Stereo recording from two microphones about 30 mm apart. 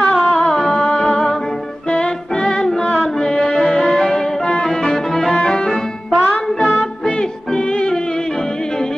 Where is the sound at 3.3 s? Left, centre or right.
Left.